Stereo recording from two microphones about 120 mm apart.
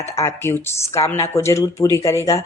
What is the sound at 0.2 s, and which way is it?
A woman's voice, 20° left (ahead or behind).